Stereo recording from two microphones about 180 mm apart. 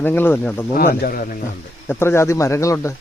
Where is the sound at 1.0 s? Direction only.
50° left (ahead or behind).